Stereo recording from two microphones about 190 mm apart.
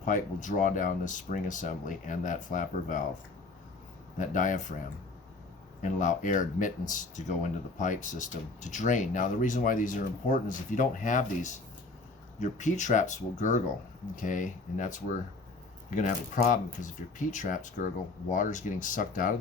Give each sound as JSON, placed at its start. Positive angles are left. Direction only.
{"t": 0.0, "sound": "speech", "side_deg": 45}
{"t": 4.2, "sound": "speech", "side_deg": 40}
{"t": 5.8, "sound": "speech", "side_deg": 40}